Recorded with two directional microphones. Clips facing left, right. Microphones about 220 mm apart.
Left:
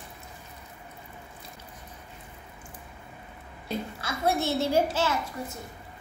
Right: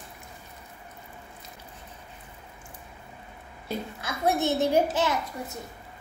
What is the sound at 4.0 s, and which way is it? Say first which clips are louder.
A child's voice: right 2 dB; 20° right (ahead or behind).